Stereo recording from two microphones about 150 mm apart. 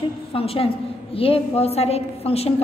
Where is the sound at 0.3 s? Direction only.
40° left (ahead or behind).